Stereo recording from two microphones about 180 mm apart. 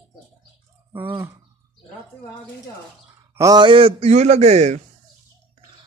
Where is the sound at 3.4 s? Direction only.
20° right (ahead or behind); by 4.8 s 40° right (ahead or behind).